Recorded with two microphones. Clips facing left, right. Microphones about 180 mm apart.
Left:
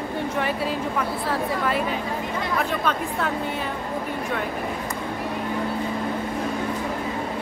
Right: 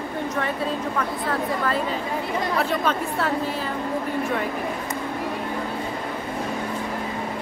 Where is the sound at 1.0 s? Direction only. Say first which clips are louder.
Even; 5° left (ahead or behind).